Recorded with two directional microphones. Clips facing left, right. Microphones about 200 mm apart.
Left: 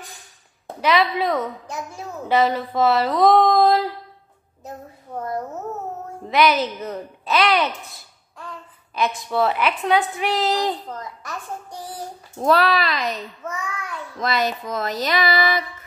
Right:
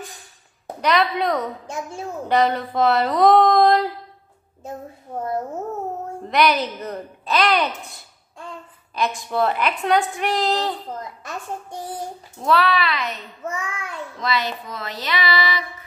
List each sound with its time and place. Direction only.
0.7 s a woman's voice: 5° left (ahead or behind)
1.7 s a woman's voice: 25° right (ahead or behind)
2.2 s a woman's voice: 5° left (ahead or behind)
5.2 s a woman's voice: 25° right (ahead or behind)
6.3 s a woman's voice: 5° left (ahead or behind)
9.0 s a woman's voice: centre (ahead or behind)
10.9 s a woman's voice: 25° right (ahead or behind)
12.4 s speech: 40° left (ahead or behind)
13.5 s a woman's voice: 25° right (ahead or behind)
14.2 s music: 45° left (ahead or behind)